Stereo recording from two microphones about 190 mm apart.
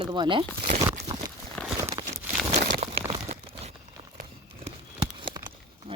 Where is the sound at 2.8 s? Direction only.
30° right (ahead or behind).